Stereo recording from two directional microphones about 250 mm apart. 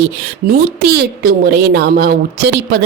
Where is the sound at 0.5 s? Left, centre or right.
Right.